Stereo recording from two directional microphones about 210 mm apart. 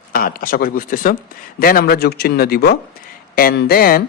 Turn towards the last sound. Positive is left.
turn(degrees=45)  # may be behind; listen again after turning